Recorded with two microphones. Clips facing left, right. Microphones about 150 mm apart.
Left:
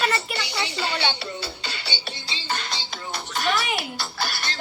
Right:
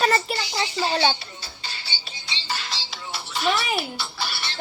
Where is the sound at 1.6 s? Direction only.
65° left (ahead or behind).